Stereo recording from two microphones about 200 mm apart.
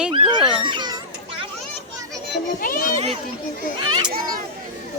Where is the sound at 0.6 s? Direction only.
25° right (ahead or behind).